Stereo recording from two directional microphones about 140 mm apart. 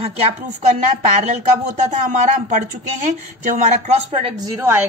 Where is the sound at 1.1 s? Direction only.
65° right (ahead or behind).